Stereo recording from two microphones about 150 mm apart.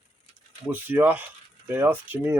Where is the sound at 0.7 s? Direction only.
10° right (ahead or behind).